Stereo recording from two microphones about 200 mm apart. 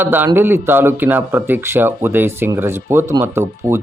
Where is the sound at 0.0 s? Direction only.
10° right (ahead or behind).